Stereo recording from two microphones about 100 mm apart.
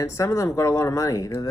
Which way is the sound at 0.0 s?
30° left (ahead or behind).